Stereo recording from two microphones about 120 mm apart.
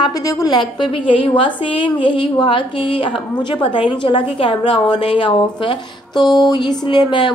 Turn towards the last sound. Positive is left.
turn(degrees=40)  # may be behind; listen again after turning